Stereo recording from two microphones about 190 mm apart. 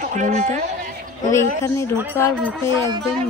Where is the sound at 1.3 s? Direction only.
15° left (ahead or behind).